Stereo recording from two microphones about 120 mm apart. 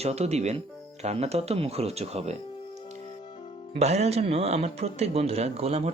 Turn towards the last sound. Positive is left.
turn(degrees=-60)  # may be behind; listen again after turning